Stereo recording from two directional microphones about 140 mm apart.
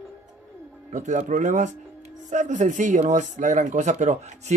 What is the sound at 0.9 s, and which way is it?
Speech, 60° right (ahead or behind).